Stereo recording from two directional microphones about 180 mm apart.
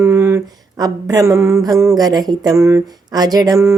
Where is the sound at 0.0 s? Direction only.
15° right (ahead or behind).